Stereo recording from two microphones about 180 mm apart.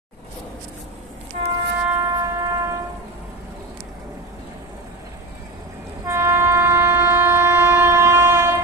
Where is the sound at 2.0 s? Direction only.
20° right (ahead or behind).